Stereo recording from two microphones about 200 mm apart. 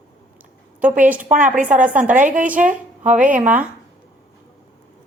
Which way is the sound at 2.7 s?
5° right (ahead or behind).